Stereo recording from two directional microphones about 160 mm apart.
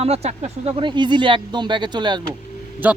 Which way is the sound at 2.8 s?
10° right (ahead or behind).